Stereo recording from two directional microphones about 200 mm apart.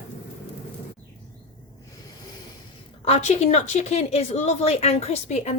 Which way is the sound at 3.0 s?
35° left (ahead or behind).